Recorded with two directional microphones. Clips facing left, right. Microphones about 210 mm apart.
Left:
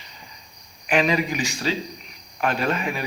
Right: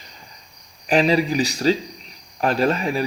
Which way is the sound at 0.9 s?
35° right (ahead or behind).